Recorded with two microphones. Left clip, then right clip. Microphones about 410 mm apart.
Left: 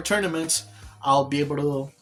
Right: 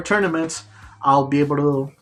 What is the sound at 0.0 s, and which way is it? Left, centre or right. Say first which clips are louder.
Speech: right 5 dB; left.